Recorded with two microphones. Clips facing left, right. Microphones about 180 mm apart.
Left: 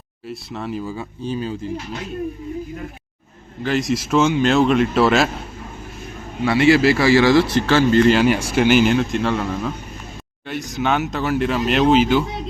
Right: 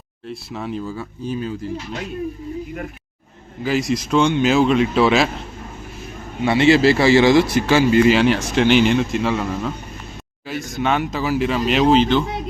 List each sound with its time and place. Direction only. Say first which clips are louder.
0.3 s speech: even; centre (ahead or behind)
0.9 s speech: even; 30° left (ahead or behind)
3.6 s speech: even; centre (ahead or behind)
6.4 s a man's voice: even; 25° right (ahead or behind); by 8.2 s 10° right (ahead or behind)
8.2 s speech: even; 10° left (ahead or behind)